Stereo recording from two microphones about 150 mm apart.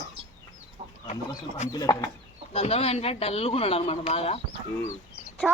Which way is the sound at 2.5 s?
40° left (ahead or behind).